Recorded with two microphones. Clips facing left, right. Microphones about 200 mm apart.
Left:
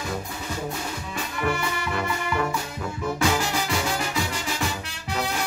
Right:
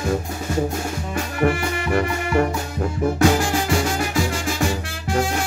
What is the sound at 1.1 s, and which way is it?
Music, 45° right (ahead or behind).